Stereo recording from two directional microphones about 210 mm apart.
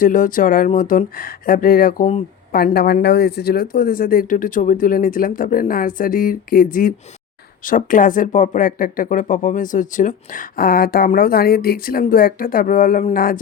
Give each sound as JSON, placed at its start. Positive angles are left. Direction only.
{"t": 0.0, "sound": "speech", "side_deg": 40}